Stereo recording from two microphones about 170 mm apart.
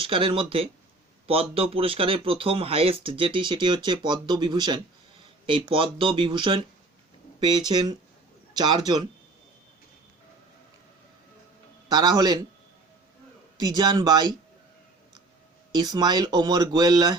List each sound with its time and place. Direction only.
0.0 s speech: 30° right (ahead or behind)
11.9 s speech: 25° right (ahead or behind)
13.6 s speech: 25° right (ahead or behind)
15.7 s speech: 25° right (ahead or behind)